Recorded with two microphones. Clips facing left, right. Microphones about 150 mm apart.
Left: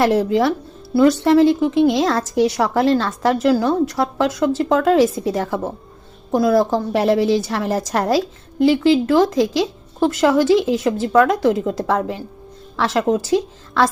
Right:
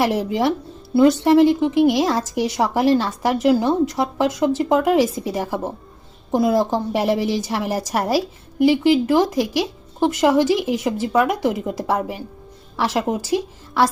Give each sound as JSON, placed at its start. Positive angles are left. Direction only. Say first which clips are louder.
{"t": 0.0, "sound": "speech", "louder": "left 3 dB", "side_deg": -15}